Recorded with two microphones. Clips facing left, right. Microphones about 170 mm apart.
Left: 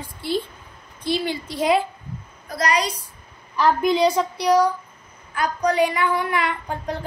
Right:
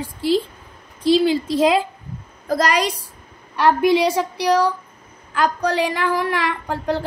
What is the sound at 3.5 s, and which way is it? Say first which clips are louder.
A woman's voice: right 3 dB; 80° right.